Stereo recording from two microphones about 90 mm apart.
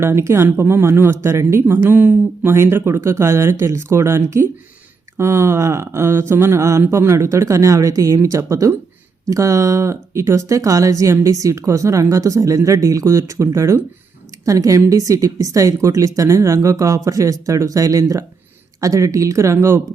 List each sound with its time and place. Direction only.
0.0 s speech: 30° right (ahead or behind)